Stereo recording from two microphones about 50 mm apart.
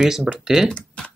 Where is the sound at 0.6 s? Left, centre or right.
Centre.